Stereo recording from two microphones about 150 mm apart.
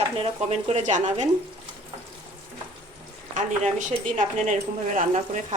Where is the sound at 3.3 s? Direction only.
55° right (ahead or behind).